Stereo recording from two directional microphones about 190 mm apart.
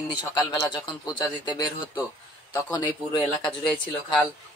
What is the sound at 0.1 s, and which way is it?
Speech, 20° left (ahead or behind).